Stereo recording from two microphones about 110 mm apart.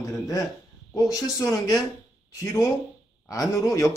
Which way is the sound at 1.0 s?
30° left (ahead or behind).